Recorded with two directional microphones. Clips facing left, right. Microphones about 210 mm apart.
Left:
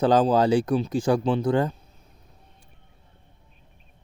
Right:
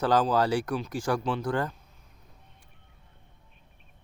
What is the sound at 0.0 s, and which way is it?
Speech, 20° left (ahead or behind).